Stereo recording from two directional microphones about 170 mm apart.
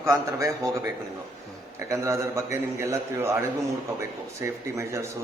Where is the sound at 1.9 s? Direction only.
15° right (ahead or behind).